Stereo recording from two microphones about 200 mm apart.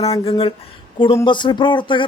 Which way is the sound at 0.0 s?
30° left (ahead or behind).